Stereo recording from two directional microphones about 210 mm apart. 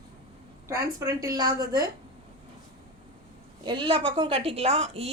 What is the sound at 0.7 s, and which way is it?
A woman's voice, 15° right (ahead or behind).